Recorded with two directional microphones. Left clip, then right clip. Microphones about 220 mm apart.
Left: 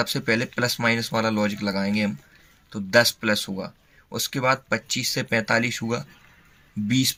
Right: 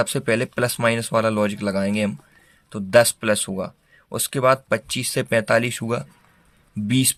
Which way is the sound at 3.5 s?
65° right (ahead or behind).